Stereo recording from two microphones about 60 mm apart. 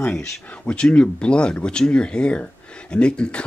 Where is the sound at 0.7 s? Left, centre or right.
Centre.